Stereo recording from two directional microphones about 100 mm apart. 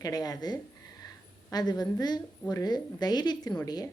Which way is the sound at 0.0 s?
40° left (ahead or behind).